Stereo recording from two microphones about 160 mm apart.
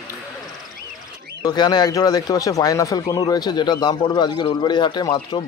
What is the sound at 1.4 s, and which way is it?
Speech, 25° left (ahead or behind).